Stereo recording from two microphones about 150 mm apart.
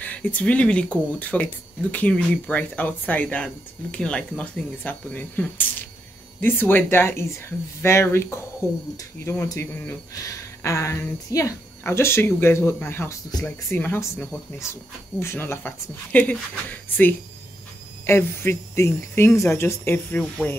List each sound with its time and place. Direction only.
0.0 s speech: 10° left (ahead or behind)